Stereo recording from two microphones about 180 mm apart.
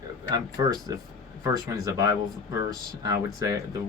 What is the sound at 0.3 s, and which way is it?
Speech, 20° right (ahead or behind).